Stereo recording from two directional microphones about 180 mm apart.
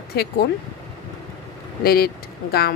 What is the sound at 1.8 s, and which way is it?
Speech, 60° left (ahead or behind).